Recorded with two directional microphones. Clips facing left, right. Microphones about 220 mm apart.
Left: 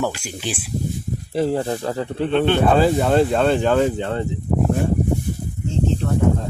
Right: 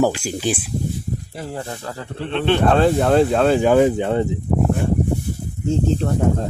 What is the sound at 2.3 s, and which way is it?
Speech, centre (ahead or behind).